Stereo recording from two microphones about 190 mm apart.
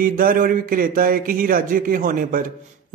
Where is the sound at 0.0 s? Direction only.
50° right (ahead or behind).